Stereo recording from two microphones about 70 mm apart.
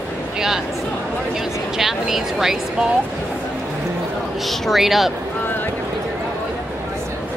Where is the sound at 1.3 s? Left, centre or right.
Centre.